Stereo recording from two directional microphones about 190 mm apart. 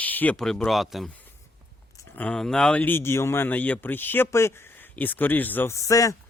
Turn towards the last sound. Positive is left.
turn(degrees=15)  # may be behind; listen again after turning